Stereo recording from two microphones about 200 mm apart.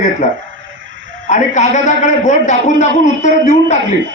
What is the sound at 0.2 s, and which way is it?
A man's voice, 35° left (ahead or behind).